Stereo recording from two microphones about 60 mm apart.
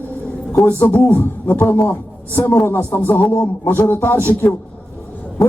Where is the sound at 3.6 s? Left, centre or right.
Left.